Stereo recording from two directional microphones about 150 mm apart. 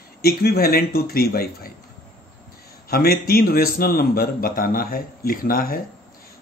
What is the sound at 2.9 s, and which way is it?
A man's voice, 90° left.